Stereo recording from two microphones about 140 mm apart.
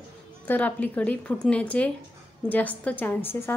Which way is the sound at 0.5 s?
10° left (ahead or behind).